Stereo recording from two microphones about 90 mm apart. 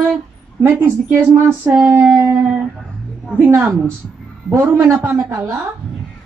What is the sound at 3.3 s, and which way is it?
Speech, 30° right (ahead or behind).